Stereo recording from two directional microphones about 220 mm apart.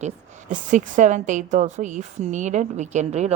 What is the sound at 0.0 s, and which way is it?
Speech, 35° right (ahead or behind).